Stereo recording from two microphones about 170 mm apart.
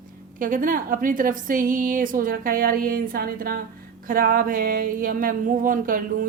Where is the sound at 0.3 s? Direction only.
50° right (ahead or behind).